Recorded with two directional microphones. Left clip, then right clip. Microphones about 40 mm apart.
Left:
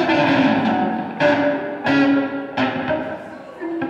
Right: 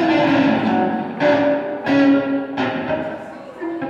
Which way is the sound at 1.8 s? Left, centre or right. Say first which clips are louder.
Even; left.